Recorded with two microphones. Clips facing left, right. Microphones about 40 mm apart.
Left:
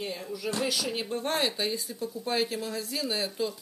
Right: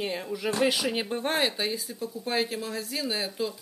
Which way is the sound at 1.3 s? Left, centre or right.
Centre.